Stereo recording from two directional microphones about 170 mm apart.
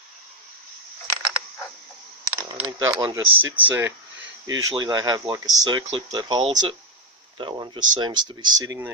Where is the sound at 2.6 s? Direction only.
20° right (ahead or behind).